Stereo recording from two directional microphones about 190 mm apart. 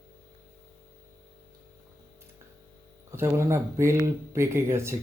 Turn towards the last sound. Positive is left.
turn(degrees=-15)  # may be behind; listen again after turning